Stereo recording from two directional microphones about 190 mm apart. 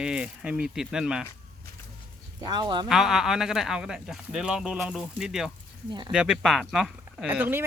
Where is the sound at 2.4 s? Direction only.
25° right (ahead or behind).